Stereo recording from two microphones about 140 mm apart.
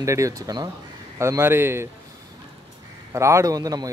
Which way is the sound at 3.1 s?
20° right (ahead or behind).